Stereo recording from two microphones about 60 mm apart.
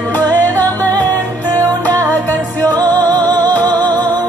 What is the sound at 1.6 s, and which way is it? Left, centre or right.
Music, right.